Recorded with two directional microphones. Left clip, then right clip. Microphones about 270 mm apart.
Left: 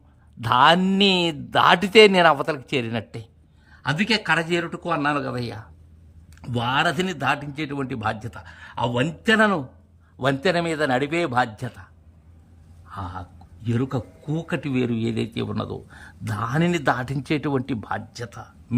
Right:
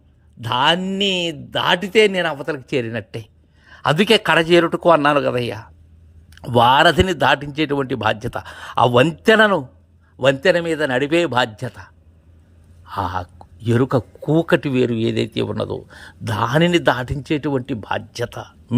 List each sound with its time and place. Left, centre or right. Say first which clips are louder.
0.4 s speech: left 1 dB; centre
3.7 s speech: right 8 dB; centre
12.9 s speech: right 11 dB; centre